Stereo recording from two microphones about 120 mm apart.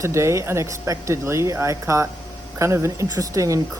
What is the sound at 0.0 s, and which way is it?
Speech, 25° right (ahead or behind).